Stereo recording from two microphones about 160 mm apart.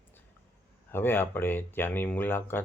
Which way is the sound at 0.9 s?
15° left (ahead or behind).